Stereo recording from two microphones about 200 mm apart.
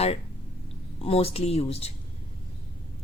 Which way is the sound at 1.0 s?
30° left (ahead or behind).